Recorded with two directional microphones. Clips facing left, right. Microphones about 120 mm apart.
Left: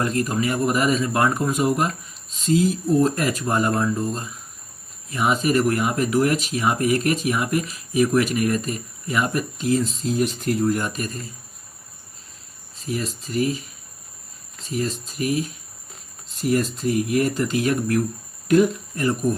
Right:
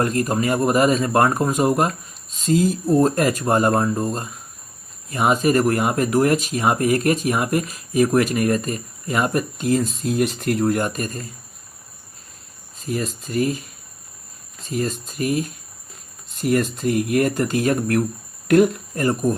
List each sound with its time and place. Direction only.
0.0 s speech: 45° right (ahead or behind); by 10.8 s 65° right (ahead or behind)
10.8 s speech: 45° right (ahead or behind)
12.8 s speech: 50° right (ahead or behind)
14.6 s speech: 45° right (ahead or behind)
18.4 s speech: 60° right (ahead or behind)